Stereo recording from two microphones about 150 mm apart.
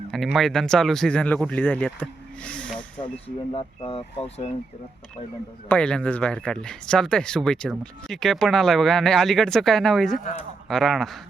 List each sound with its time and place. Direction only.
0.3 s speech: 5° left (ahead or behind)
3.2 s speech: 35° left (ahead or behind)
5.6 s speech: 10° left (ahead or behind)